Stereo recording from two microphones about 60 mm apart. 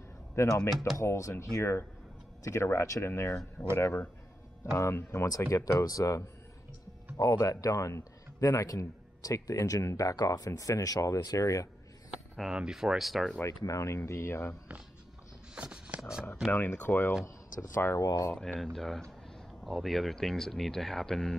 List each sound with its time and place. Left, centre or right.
0.5 s speech: centre
1.0 s speech: left
1.4 s speech: left
4.7 s a man's voice: left
12.1 s a sound: centre
12.5 s speech: centre
13.4 s speech: left
15.5 s a sound: centre
16.5 s speech: left
18.0 s speech: left
18.6 s speech: centre